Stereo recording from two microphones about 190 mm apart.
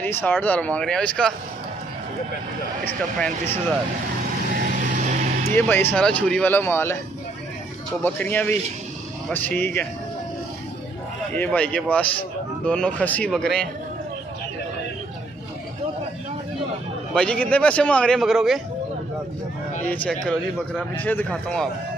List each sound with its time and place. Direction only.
0.0 s speech: 10° left (ahead or behind)
3.2 s speech: 10° left (ahead or behind)
4.6 s vehicle: 40° right (ahead or behind)
5.5 s speech: 10° left (ahead or behind)
8.0 s speech: 10° left (ahead or behind)
11.3 s a man's voice: 5° left (ahead or behind)
17.1 s a man's voice: 5° left (ahead or behind)
19.9 s a man's voice: 5° left (ahead or behind)